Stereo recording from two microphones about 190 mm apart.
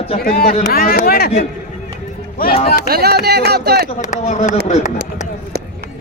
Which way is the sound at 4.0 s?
40° left (ahead or behind).